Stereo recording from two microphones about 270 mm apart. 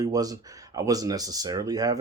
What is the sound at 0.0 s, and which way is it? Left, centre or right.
Speech, centre.